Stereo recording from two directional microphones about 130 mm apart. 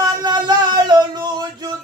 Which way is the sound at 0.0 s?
30° right (ahead or behind).